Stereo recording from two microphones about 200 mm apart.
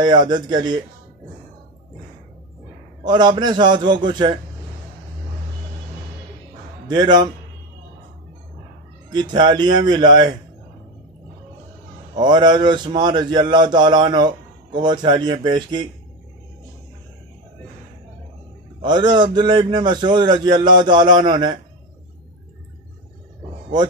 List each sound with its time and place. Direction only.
0.0 s a man's voice: 20° right (ahead or behind)
3.0 s a man's voice: 20° right (ahead or behind)
6.9 s a man's voice: 20° right (ahead or behind)
9.1 s a man's voice: 20° right (ahead or behind)
12.2 s a man's voice: 20° right (ahead or behind)
18.8 s a man's voice: 20° right (ahead or behind)